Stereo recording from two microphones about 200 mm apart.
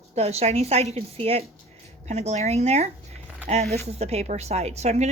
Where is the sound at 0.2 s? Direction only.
30° right (ahead or behind).